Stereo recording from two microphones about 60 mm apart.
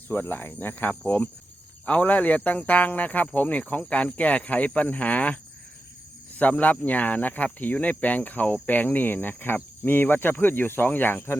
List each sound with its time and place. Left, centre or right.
0.1 s cricket: left
1.9 s speech: left
9.8 s cricket: left